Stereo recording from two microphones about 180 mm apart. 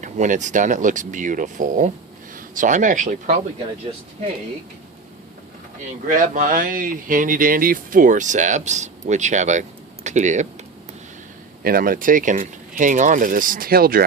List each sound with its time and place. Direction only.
0.0 s speech: 45° right (ahead or behind)
6.1 s speech: 45° right (ahead or behind)
11.6 s speech: 55° right (ahead or behind)